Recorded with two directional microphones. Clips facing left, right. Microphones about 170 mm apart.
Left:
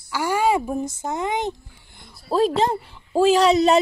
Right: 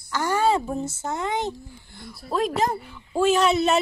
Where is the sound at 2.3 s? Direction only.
30° left (ahead or behind).